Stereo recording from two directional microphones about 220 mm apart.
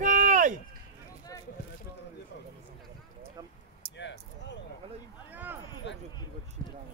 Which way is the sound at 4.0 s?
55° left (ahead or behind).